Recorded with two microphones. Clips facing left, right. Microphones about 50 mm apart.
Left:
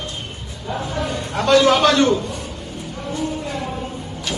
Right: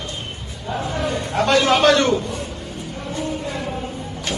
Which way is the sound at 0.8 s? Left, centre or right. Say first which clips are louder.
Right 2 dB; right.